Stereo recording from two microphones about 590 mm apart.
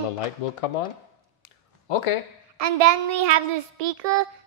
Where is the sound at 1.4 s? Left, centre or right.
Left.